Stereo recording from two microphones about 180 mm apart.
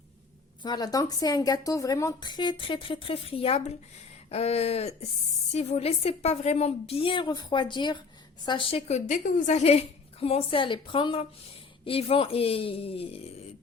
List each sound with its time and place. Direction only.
0.6 s a woman's voice: 20° left (ahead or behind)